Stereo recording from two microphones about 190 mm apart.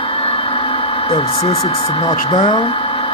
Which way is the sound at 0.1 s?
30° left (ahead or behind).